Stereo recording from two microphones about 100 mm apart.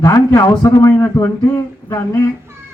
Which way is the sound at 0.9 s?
20° left (ahead or behind).